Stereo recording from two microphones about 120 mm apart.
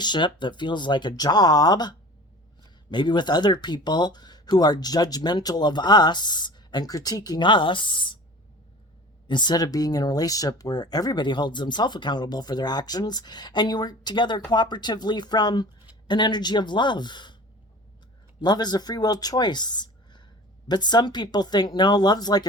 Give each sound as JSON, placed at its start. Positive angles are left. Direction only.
{"t": 0.0, "sound": "speech", "side_deg": 40}
{"t": 9.2, "sound": "speech", "side_deg": 40}
{"t": 18.3, "sound": "speech", "side_deg": 35}